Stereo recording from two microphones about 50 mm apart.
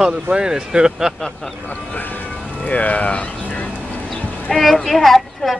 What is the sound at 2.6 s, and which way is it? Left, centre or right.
Speech, left.